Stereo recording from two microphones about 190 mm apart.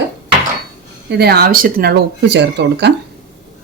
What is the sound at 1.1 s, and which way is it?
Speech, 55° right (ahead or behind).